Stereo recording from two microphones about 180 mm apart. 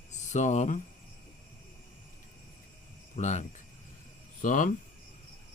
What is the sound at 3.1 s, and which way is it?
Speech, 40° left (ahead or behind).